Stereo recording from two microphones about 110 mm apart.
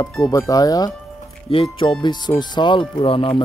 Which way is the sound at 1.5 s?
55° left (ahead or behind).